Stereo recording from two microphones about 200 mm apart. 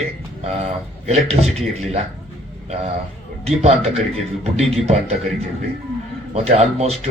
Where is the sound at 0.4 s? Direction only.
30° right (ahead or behind).